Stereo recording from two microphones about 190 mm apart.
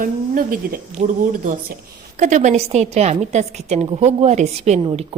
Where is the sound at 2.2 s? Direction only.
40° right (ahead or behind).